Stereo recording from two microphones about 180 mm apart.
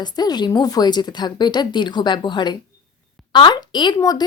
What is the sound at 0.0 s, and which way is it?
Speech, 25° left (ahead or behind).